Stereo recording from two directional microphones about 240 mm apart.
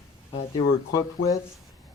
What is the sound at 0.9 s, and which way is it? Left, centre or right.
Speech, centre.